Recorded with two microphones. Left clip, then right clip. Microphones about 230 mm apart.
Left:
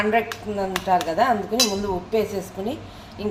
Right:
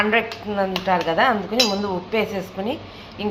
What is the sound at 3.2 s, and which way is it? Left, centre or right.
Speech, centre.